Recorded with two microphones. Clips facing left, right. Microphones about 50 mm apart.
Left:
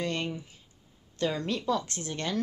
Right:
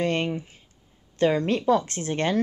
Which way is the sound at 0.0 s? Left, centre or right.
Right.